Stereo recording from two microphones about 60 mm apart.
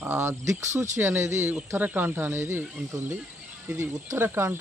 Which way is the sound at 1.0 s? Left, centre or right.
Right.